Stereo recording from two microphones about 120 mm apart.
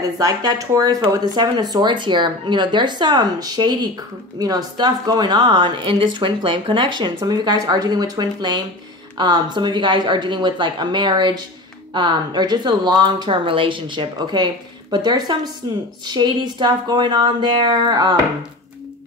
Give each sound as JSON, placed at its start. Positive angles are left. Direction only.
{"t": 0.2, "sound": "a woman's voice", "side_deg": -30}